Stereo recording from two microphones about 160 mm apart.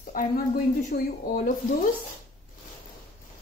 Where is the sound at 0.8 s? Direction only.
60° left (ahead or behind).